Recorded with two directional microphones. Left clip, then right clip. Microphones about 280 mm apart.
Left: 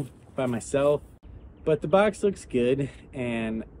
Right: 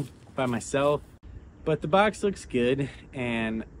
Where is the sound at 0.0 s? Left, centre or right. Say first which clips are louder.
Even; centre.